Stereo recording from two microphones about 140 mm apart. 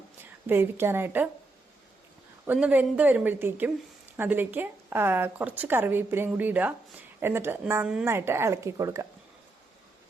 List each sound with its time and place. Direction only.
0.4 s a woman's voice: 15° right (ahead or behind)
2.5 s a woman's voice: 10° right (ahead or behind)